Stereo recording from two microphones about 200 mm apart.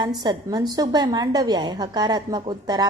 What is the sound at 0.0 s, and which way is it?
A woman's voice, 20° right (ahead or behind).